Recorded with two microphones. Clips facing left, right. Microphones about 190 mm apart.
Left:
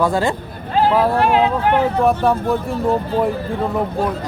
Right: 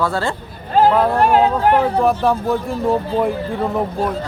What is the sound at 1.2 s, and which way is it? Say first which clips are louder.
Speech: right 1 dB; 40° right (ahead or behind).